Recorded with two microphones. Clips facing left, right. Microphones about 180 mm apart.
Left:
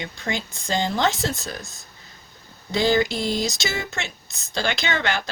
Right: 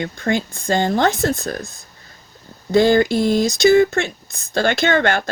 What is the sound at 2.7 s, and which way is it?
Speech, 55° right (ahead or behind).